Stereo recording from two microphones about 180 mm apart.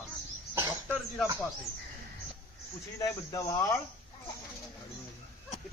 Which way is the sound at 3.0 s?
20° left (ahead or behind).